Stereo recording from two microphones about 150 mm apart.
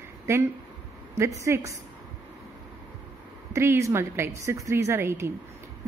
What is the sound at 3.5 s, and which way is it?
Speech, 15° right (ahead or behind).